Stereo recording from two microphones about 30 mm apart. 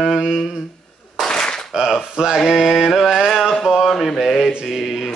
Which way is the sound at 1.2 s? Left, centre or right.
Left.